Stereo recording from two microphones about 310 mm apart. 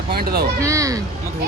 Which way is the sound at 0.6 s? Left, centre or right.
Centre.